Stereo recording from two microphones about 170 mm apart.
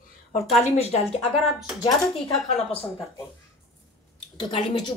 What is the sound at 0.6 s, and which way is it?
Speech, 40° left (ahead or behind).